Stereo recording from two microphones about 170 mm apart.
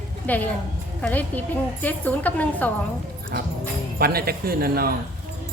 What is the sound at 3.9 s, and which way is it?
Speech, 65° right (ahead or behind).